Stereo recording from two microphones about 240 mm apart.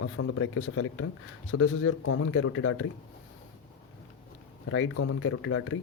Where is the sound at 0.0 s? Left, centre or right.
Left.